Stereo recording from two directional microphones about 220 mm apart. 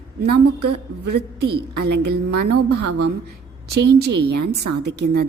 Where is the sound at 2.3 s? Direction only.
90° right.